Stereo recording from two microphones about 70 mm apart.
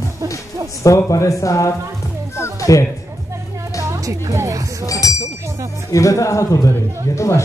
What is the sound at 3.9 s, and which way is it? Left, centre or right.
Speech, right.